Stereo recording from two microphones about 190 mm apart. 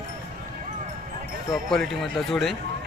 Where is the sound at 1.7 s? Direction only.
Centre (ahead or behind).